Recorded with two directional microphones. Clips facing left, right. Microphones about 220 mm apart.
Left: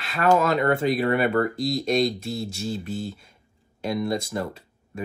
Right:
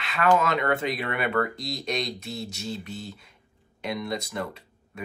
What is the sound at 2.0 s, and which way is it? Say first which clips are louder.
Speech: left 7 dB; centre (ahead or behind).